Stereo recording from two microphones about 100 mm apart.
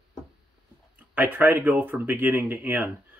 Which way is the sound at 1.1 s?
20° right (ahead or behind).